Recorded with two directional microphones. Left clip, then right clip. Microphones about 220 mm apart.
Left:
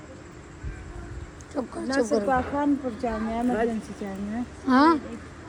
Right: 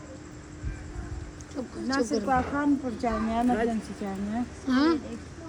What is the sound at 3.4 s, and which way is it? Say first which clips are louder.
A woman's voice: left 1 dB; centre (ahead or behind).